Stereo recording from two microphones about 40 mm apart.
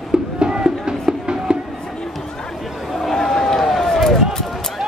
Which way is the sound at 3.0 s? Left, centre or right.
Centre.